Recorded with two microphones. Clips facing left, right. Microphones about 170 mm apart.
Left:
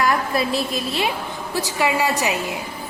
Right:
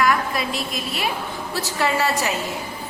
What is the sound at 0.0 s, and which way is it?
A woman's voice, 35° left (ahead or behind).